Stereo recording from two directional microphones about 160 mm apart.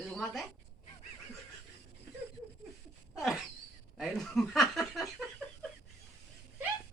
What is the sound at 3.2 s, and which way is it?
Speech, centre (ahead or behind).